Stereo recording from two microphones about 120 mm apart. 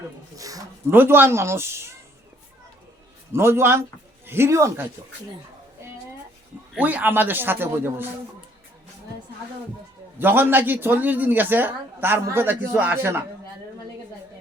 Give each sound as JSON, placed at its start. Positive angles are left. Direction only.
{"t": 0.3, "sound": "speech", "side_deg": -30}
{"t": 0.9, "sound": "speech", "side_deg": -15}
{"t": 3.3, "sound": "speech", "side_deg": -20}
{"t": 5.8, "sound": "a sound", "side_deg": -20}
{"t": 6.7, "sound": "speech", "side_deg": -15}
{"t": 10.2, "sound": "speech", "side_deg": -15}